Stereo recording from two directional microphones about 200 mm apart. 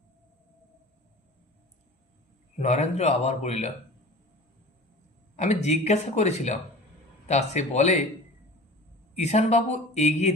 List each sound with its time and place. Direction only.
2.6 s speech: 35° left (ahead or behind)
5.6 s speech: 35° left (ahead or behind)
9.1 s speech: 35° left (ahead or behind)